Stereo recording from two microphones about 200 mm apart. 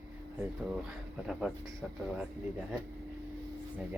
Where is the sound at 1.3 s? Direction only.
Centre (ahead or behind).